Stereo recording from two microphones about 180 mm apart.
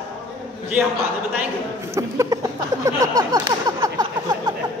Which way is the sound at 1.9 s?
15° right (ahead or behind).